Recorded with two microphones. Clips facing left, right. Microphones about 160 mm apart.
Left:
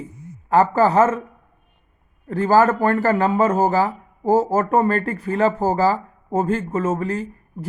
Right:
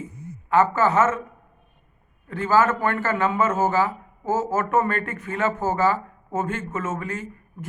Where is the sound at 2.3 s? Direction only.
40° left (ahead or behind).